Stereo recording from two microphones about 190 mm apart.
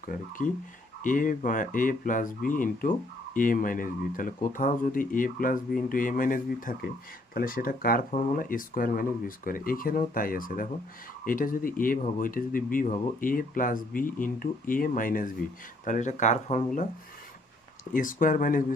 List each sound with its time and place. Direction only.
0.0 s speech: 45° left (ahead or behind)
17.9 s speech: 45° left (ahead or behind)